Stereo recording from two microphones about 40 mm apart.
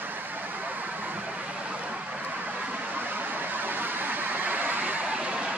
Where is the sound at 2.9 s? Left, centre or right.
Right.